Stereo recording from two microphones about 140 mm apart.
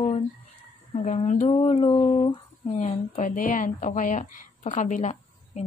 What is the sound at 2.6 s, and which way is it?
Speech, 50° left (ahead or behind).